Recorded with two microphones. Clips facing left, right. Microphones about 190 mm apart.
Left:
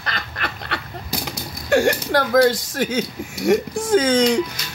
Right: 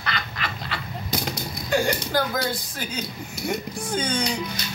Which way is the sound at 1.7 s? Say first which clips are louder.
Left 6 dB; 75° left (ahead or behind).